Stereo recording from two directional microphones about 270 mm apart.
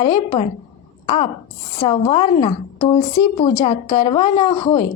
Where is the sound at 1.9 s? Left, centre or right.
Centre.